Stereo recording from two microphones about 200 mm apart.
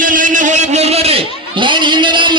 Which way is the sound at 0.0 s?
40° right (ahead or behind).